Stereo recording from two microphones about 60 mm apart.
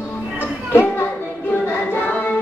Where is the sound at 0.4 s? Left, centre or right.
Left.